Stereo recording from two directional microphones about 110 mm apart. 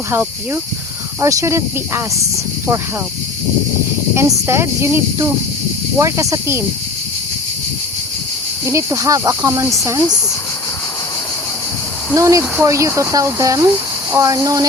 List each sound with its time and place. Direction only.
0.1 s speech: 20° right (ahead or behind)
4.1 s speech: 25° right (ahead or behind)
8.6 s speech: 25° right (ahead or behind)
12.1 s speech: 30° right (ahead or behind)